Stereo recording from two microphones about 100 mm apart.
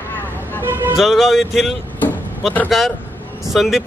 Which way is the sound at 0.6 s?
20° right (ahead or behind).